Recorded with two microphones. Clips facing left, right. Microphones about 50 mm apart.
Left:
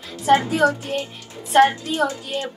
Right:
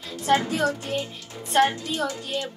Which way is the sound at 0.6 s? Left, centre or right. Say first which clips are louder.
Left 5 dB; left.